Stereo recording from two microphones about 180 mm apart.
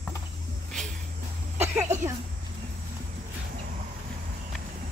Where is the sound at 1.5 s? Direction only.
15° right (ahead or behind).